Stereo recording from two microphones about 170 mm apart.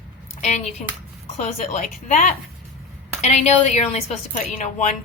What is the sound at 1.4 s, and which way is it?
A woman's voice, 45° left (ahead or behind).